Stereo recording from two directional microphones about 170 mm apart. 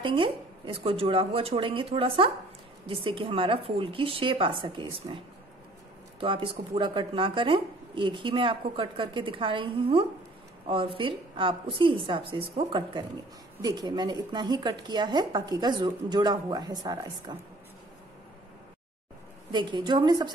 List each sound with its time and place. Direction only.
0.0 s a woman's voice: 30° right (ahead or behind)
19.5 s speech: 25° right (ahead or behind)